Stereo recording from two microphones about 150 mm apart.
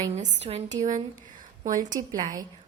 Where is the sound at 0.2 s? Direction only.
45° right (ahead or behind).